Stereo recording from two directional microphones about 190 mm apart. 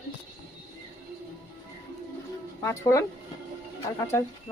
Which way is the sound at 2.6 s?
15° left (ahead or behind).